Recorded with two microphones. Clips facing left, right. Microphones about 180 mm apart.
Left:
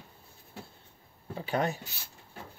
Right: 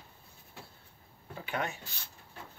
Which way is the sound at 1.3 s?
35° left (ahead or behind).